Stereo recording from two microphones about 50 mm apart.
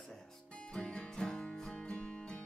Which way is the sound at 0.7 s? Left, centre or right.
Left.